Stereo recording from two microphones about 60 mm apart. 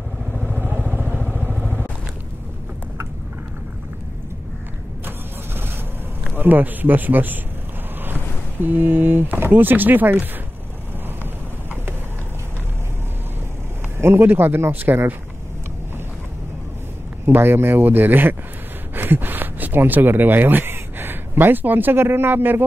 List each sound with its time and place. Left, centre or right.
0.6 s vehicle: right
6.3 s speech: right
13.9 s speech: right
17.3 s speech: right